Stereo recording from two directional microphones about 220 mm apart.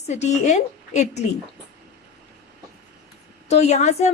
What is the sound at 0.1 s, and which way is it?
A woman's voice, 30° left (ahead or behind).